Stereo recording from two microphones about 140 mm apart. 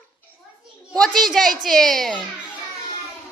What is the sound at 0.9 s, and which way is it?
A child's voice, 5° left (ahead or behind).